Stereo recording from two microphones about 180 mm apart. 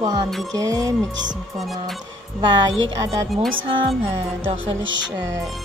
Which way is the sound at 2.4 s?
25° right (ahead or behind).